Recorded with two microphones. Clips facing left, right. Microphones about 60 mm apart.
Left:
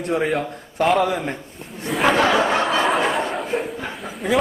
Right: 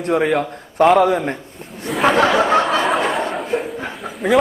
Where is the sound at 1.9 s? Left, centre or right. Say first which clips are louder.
Right 2 dB; centre.